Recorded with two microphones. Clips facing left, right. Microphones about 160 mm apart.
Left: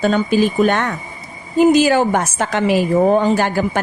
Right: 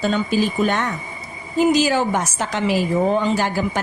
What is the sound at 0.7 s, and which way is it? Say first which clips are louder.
A man's voice: left 4 dB; 65° left (ahead or behind).